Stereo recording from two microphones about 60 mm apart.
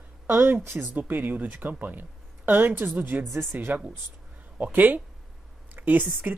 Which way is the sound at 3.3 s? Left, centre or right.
Right.